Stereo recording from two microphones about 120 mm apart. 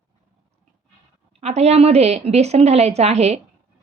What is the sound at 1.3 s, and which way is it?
A woman's voice, 60° right (ahead or behind).